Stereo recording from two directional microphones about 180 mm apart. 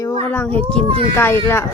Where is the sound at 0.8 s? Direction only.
30° right (ahead or behind).